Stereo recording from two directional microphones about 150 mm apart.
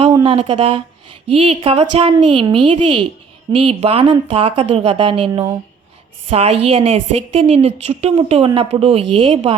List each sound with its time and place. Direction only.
0.1 s a woman's voice: 35° right (ahead or behind)